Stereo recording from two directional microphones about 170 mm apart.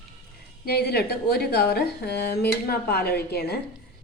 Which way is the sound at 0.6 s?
70° left (ahead or behind).